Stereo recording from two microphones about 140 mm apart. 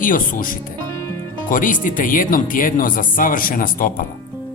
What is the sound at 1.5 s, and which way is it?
Speech, 75° left (ahead or behind).